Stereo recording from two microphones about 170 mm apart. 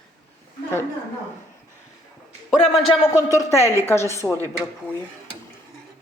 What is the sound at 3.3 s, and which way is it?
Speech, 15° left (ahead or behind).